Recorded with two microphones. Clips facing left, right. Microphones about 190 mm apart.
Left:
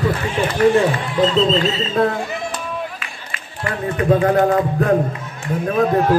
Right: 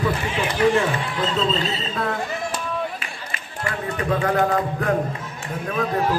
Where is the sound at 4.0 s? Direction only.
30° left (ahead or behind).